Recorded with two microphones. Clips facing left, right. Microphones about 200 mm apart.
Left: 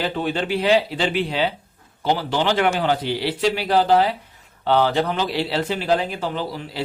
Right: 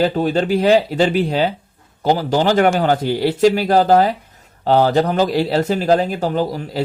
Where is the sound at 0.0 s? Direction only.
40° right (ahead or behind).